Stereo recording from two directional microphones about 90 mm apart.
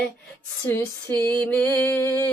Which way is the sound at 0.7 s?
25° left (ahead or behind).